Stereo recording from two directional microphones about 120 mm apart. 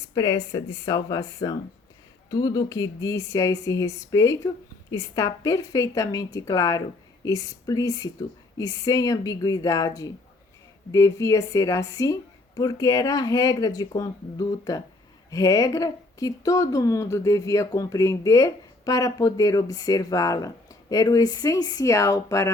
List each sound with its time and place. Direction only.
0.1 s speech: 30° left (ahead or behind)